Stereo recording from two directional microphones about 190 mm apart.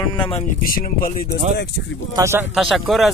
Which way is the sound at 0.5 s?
50° left (ahead or behind).